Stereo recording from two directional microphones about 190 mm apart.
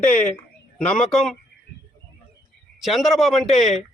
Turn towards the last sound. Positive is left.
turn(degrees=0)  # may be behind; listen again after turning